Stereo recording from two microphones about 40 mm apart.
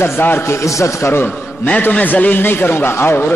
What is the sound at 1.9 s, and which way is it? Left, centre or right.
Speech, left.